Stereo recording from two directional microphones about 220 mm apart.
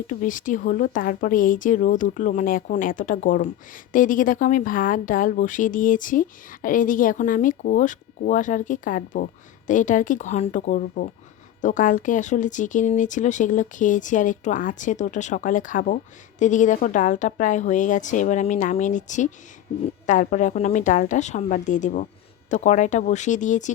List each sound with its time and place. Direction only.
0.1 s speech: 35° left (ahead or behind)